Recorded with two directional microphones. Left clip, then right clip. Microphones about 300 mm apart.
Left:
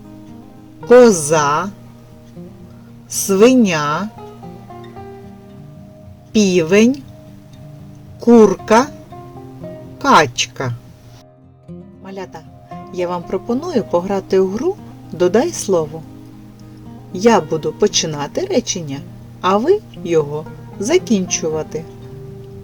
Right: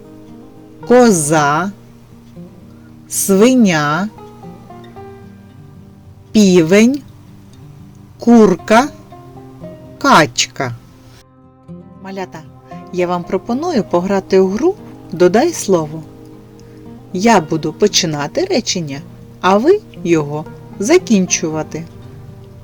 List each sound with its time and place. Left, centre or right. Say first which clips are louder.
0.9 s speech: left 2 dB; centre
3.1 s speech: even; centre
4.7 s music: left 1 dB; centre
6.3 s speech: right 3 dB; centre
8.4 s speech: right 1 dB; centre
10.0 s speech: right 2 dB; right
12.0 s speech: right 4 dB; centre
17.1 s speech: right 1 dB; centre